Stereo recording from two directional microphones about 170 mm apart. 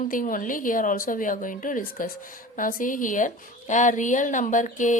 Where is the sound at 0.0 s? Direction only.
55° left (ahead or behind).